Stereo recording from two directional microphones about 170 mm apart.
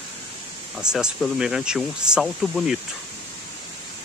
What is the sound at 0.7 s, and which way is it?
Speech, 5° right (ahead or behind).